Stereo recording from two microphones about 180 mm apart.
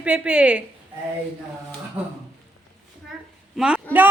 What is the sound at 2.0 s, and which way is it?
Speech, 10° right (ahead or behind).